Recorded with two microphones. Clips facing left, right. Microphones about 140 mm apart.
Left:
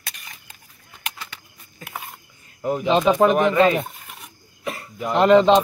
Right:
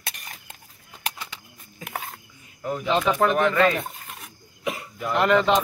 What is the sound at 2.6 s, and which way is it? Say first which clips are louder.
Speech: left 5 dB; 20° left (ahead or behind).